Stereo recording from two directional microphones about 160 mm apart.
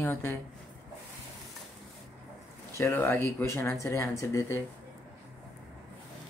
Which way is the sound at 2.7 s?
15° left (ahead or behind).